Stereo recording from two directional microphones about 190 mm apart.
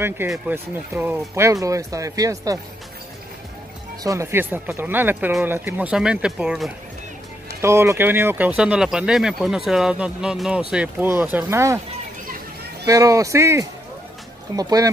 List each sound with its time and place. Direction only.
0.3 s speech: 10° right (ahead or behind)
4.0 s speech: 15° right (ahead or behind)
7.6 s speech: 15° right (ahead or behind)
12.8 s speech: 15° right (ahead or behind)